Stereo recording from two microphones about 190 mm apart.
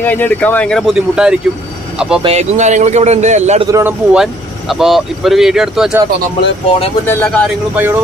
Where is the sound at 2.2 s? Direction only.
35° right (ahead or behind).